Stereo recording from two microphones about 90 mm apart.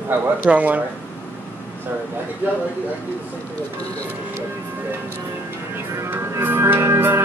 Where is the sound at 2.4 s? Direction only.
20° right (ahead or behind).